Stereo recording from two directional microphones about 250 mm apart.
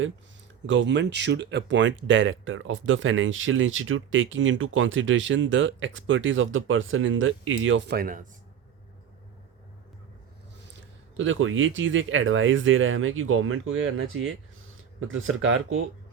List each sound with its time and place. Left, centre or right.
0.7 s speech: right
10.8 s speech: right